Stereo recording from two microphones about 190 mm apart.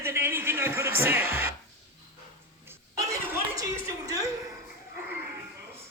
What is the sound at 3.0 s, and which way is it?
Chuckle, 15° right (ahead or behind).